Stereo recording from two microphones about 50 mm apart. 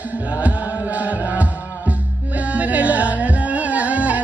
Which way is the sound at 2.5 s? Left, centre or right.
Right.